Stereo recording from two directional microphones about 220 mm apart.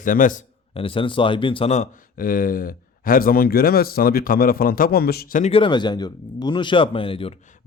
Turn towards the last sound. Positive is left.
turn(degrees=25)  # may be behind; listen again after turning